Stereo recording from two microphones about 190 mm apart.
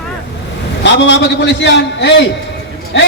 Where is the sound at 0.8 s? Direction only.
65° left (ahead or behind).